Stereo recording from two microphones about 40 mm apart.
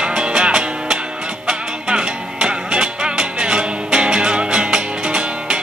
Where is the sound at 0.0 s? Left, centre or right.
Right.